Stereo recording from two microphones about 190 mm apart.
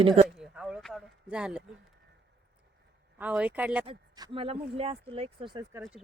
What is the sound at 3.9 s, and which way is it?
A woman's voice, 25° right (ahead or behind).